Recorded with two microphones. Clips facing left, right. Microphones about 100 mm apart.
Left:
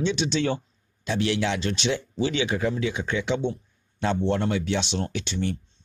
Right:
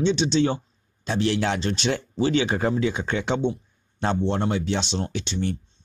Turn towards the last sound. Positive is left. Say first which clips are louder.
# right 1 dB
turn(degrees=-30)  # may be behind; listen again after turning